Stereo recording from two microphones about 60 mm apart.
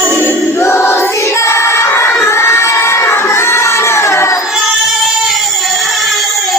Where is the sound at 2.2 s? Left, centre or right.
Left.